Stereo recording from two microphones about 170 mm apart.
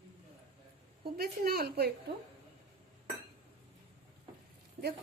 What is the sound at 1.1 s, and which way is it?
Speech, 65° right (ahead or behind).